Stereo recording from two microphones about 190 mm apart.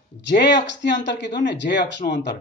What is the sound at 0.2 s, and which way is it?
Speech, 65° left (ahead or behind).